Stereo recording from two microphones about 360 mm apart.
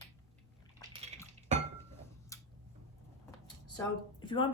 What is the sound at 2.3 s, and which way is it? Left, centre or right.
Tick-tock, centre.